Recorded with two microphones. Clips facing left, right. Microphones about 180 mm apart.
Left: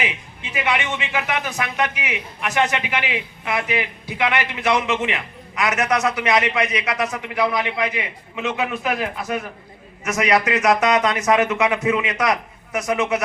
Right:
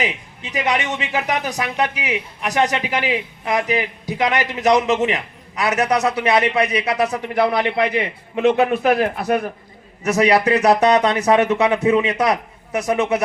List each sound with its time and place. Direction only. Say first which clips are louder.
0.0 s a man's voice: right 3 dB; 40° right (ahead or behind)